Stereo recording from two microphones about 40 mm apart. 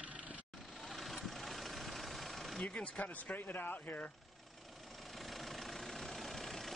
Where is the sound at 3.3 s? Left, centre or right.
Left.